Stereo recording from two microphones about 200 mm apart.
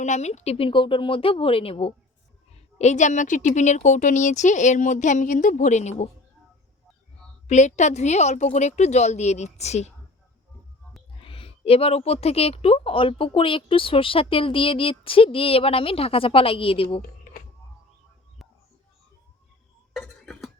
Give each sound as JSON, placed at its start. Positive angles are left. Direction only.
{"t": 0.0, "sound": "a woman's voice", "side_deg": 35}
{"t": 7.4, "sound": "speech", "side_deg": 35}
{"t": 11.2, "sound": "a woman's voice", "side_deg": 25}
{"t": 19.9, "sound": "a sound", "side_deg": 0}